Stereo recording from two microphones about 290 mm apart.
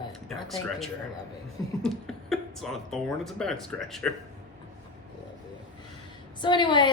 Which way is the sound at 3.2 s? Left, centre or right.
Centre.